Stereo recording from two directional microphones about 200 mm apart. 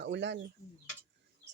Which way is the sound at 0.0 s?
60° right (ahead or behind).